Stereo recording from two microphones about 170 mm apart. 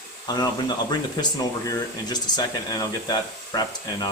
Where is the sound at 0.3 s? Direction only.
25° left (ahead or behind).